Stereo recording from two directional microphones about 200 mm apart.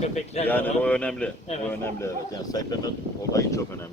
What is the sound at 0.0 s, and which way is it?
Speech, 30° left (ahead or behind).